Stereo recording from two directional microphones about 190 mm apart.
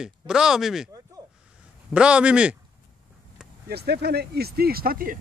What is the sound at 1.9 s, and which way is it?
Speech, 5° right (ahead or behind).